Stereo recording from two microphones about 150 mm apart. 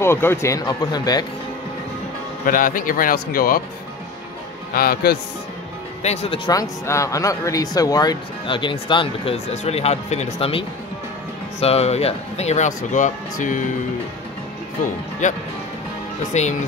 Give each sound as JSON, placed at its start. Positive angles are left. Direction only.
{"t": 0.0, "sound": "speech", "side_deg": 15}
{"t": 2.4, "sound": "speech", "side_deg": 65}
{"t": 4.7, "sound": "a man's voice", "side_deg": 85}
{"t": 6.0, "sound": "speech", "side_deg": 40}
{"t": 6.4, "sound": "speech", "side_deg": 25}
{"t": 11.6, "sound": "speech", "side_deg": 45}
{"t": 15.2, "sound": "speech", "side_deg": 55}